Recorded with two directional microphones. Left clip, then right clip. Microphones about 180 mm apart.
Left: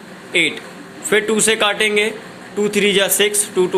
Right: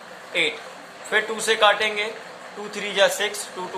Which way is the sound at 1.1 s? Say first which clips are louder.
Left 6 dB; 30° left (ahead or behind).